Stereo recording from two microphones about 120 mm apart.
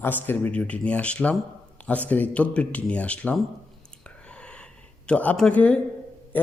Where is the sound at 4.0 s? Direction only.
10° left (ahead or behind).